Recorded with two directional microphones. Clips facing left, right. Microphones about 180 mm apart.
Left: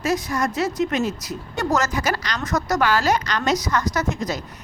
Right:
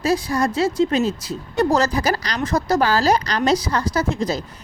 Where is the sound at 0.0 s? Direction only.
30° right (ahead or behind).